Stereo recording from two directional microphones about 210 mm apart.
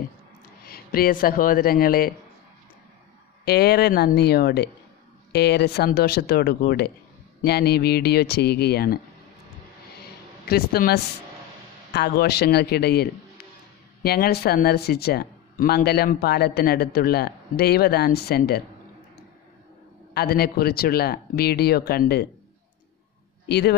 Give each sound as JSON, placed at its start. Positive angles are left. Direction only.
{"t": 0.7, "sound": "speech", "side_deg": 45}
{"t": 3.4, "sound": "speech", "side_deg": 50}
{"t": 10.5, "sound": "speech", "side_deg": 45}
{"t": 20.2, "sound": "speech", "side_deg": 45}
{"t": 23.5, "sound": "speech", "side_deg": 50}